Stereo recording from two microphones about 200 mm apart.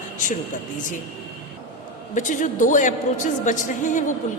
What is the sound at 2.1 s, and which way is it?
A woman's voice, 40° left (ahead or behind).